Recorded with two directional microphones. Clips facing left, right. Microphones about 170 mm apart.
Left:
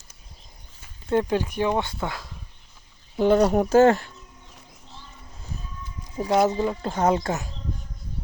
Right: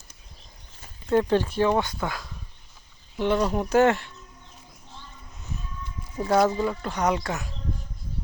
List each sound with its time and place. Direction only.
1.1 s speech: 15° left (ahead or behind)
3.2 s speech: 40° left (ahead or behind)
6.1 s speech: 20° left (ahead or behind)